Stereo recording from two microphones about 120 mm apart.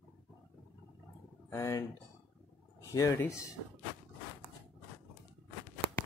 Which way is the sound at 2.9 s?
25° left (ahead or behind).